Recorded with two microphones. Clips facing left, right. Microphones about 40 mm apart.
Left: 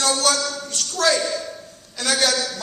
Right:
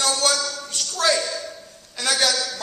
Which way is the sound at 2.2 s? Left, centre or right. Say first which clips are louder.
Left 3 dB; centre.